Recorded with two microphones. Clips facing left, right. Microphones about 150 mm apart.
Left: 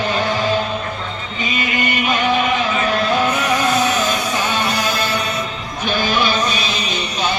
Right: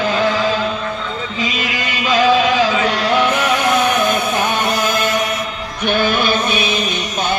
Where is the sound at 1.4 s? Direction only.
90° right; by 3.9 s 65° right (ahead or behind).